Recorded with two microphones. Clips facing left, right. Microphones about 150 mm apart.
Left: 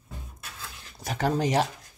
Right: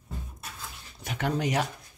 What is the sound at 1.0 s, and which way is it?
Speech, 35° left (ahead or behind).